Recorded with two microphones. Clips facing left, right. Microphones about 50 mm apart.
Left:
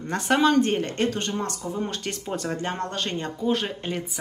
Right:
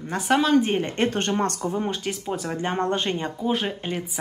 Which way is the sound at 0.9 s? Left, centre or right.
Right.